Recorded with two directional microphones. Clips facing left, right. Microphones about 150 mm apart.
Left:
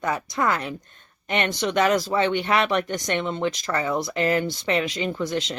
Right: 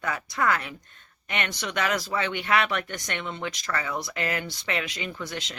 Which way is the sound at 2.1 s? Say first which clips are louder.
Left 4 dB; 25° left (ahead or behind).